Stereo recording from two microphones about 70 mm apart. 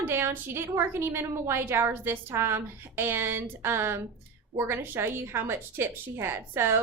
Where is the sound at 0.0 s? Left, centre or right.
Right.